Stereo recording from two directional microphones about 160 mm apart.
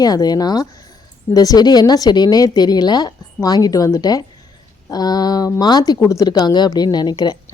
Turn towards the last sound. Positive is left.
turn(degrees=25)  # may be behind; listen again after turning